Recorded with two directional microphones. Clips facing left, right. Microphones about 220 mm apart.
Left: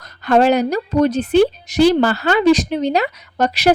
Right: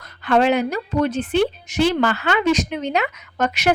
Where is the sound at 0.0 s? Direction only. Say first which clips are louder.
Left 3 dB; 40° left (ahead or behind).